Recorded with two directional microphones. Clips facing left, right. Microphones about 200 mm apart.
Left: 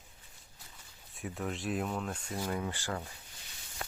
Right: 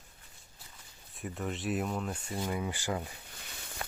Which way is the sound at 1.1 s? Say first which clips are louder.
Right 1 dB; centre (ahead or behind).